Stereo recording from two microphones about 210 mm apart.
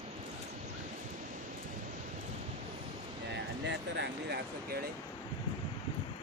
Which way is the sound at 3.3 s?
55° right (ahead or behind).